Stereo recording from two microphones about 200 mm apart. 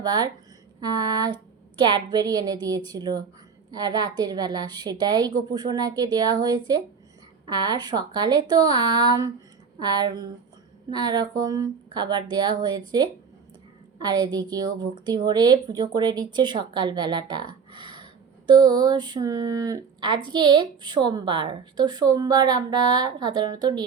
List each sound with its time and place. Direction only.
0.0 s speech: 20° right (ahead or behind)
14.0 s speech: 20° right (ahead or behind)